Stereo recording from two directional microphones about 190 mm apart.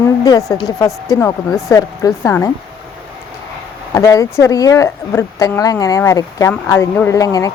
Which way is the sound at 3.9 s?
15° left (ahead or behind).